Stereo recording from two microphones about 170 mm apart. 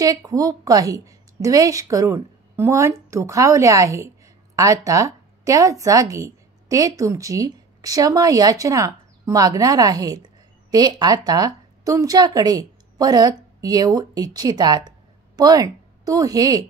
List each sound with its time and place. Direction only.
0.0 s a woman's voice: 20° right (ahead or behind)